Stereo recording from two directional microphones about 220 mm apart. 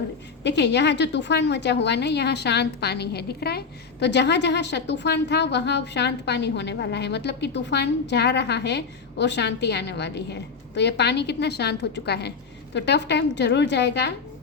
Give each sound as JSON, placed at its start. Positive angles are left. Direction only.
{"t": 0.4, "sound": "a woman's voice", "side_deg": 50}